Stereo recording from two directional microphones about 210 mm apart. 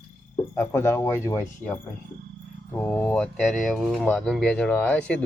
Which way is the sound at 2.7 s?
10° left (ahead or behind).